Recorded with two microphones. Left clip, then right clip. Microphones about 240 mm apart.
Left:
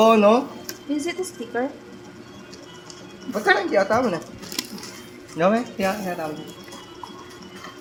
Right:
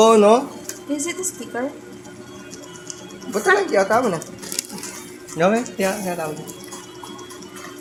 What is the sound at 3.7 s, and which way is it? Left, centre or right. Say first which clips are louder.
Speech: right 2 dB; right.